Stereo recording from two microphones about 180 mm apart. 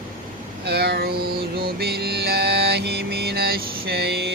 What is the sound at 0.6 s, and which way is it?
Mantra, 65° right (ahead or behind).